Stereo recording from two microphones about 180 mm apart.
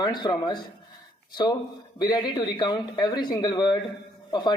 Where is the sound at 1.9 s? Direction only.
20° left (ahead or behind).